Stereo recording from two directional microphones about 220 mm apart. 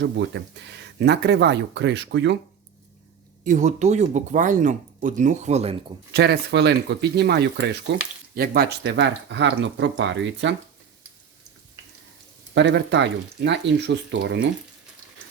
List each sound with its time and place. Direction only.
0.9 s speech: 50° right (ahead or behind)
3.4 s speech: 35° right (ahead or behind)
6.1 s speech: 50° right (ahead or behind)
12.5 s speech: 55° right (ahead or behind)